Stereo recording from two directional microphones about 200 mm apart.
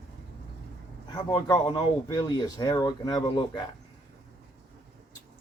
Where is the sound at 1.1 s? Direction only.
20° left (ahead or behind).